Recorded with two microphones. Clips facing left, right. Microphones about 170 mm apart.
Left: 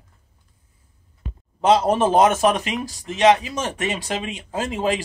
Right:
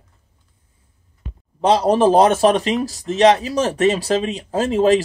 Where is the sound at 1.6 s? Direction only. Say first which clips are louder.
Right 3 dB; 35° right (ahead or behind).